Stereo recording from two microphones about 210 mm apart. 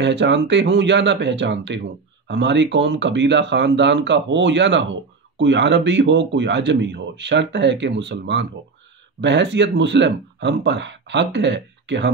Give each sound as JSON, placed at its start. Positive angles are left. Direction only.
{"t": 0.0, "sound": "speech", "side_deg": -55}